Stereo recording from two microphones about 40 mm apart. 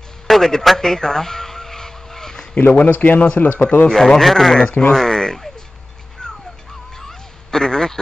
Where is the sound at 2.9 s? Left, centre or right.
Left.